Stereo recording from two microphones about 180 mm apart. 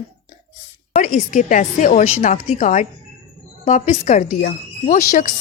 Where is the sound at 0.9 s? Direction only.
45° left (ahead or behind).